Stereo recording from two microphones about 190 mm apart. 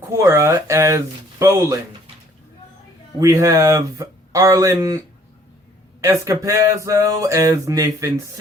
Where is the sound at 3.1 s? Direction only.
20° right (ahead or behind).